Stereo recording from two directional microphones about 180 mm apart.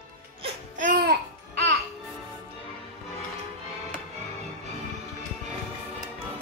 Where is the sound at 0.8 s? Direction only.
50° right (ahead or behind).